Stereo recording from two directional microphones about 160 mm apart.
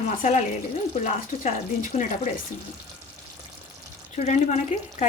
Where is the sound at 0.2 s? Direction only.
50° left (ahead or behind).